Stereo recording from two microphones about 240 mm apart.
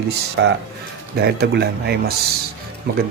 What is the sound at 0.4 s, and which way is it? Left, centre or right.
Speech, right.